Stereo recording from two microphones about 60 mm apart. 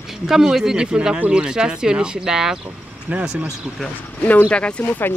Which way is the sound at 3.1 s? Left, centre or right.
Right.